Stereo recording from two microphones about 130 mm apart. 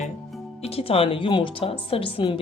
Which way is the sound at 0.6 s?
50° left (ahead or behind).